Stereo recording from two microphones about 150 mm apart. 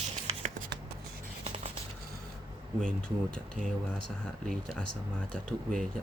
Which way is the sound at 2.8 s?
5° left (ahead or behind).